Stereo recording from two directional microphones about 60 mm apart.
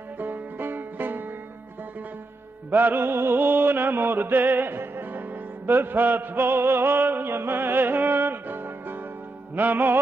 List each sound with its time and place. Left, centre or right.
0.2 s music: right
2.7 s music: right